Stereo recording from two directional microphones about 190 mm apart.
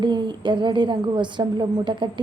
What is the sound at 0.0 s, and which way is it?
A woman's voice, 25° right (ahead or behind).